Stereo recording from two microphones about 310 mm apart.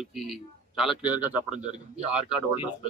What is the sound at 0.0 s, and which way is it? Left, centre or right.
A man's voice, centre.